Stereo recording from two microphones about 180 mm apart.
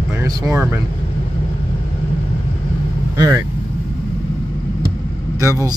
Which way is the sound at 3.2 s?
20° right (ahead or behind).